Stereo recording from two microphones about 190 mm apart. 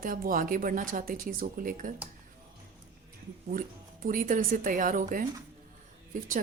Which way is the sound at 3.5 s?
45° right (ahead or behind).